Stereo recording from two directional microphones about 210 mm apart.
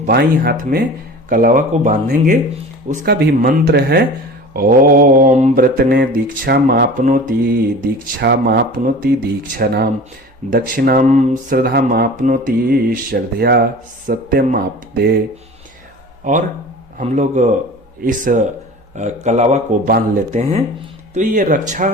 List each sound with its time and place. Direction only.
0.0 s mantra: 50° right (ahead or behind)
1.3 s speech: 40° right (ahead or behind)
3.0 s mantra: 50° right (ahead or behind)
16.3 s speech: 35° right (ahead or behind)